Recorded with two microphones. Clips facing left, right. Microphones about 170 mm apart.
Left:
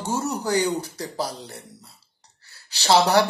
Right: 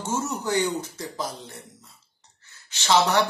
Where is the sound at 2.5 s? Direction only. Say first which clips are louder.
Left 3 dB; 35° left (ahead or behind).